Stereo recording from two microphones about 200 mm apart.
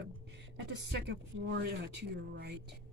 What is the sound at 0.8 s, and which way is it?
Speech, 60° right (ahead or behind).